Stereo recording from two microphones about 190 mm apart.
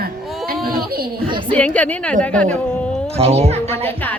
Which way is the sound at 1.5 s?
5° left (ahead or behind).